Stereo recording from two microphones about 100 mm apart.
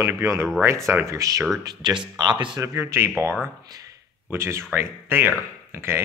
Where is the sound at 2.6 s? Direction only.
30° right (ahead or behind).